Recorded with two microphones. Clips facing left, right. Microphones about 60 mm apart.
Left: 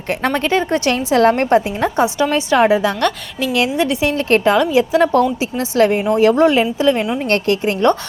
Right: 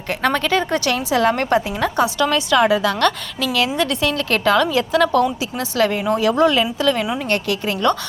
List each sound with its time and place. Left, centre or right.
0.1 s a woman's voice: left
0.9 s a woman's voice: left; by 5.0 s centre
5.1 s a woman's voice: left
7.3 s a woman's voice: left